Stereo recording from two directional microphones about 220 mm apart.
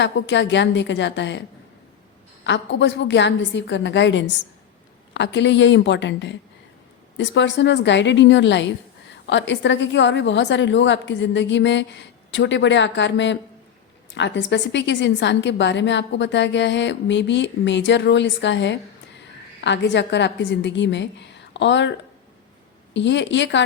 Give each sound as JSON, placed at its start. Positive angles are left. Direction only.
{"t": 0.0, "sound": "a woman's voice", "side_deg": 55}
{"t": 2.4, "sound": "a woman's voice", "side_deg": 55}
{"t": 23.0, "sound": "a woman's voice", "side_deg": 55}